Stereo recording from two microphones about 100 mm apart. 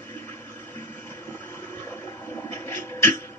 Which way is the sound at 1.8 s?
20° left (ahead or behind).